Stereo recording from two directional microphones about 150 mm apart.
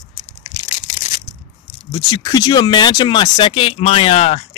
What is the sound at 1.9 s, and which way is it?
Speech, 30° left (ahead or behind).